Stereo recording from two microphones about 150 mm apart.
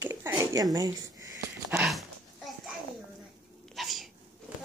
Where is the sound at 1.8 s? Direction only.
Centre (ahead or behind).